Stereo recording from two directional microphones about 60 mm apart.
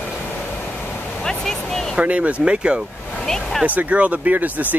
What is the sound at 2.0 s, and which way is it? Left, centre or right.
Speech, right.